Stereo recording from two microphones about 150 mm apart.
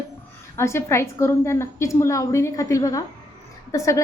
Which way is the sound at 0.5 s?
20° left (ahead or behind).